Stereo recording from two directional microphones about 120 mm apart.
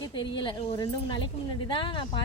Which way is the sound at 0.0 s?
40° left (ahead or behind).